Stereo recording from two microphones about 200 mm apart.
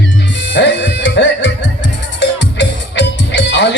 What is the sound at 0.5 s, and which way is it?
Music, 60° left (ahead or behind).